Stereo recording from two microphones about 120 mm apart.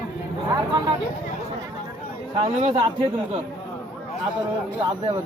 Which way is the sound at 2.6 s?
45° right (ahead or behind).